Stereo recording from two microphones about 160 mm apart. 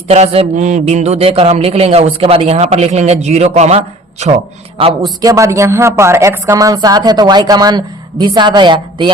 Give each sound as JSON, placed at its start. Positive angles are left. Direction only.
{"t": 0.1, "sound": "a man's voice", "side_deg": -40}
{"t": 5.2, "sound": "a woman's voice", "side_deg": -20}